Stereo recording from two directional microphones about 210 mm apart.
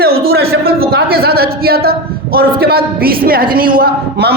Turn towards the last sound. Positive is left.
turn(degrees=-50)  # may be behind; listen again after turning